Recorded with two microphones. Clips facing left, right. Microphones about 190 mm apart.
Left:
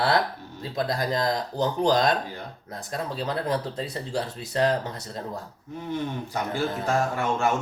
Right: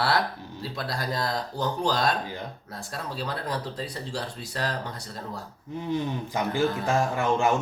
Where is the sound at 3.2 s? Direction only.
25° left (ahead or behind).